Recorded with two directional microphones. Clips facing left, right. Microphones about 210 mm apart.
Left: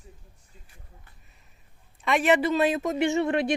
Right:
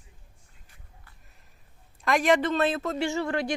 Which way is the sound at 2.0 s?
5° left (ahead or behind).